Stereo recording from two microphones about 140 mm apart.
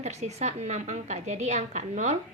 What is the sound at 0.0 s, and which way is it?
A woman's voice, 55° right (ahead or behind).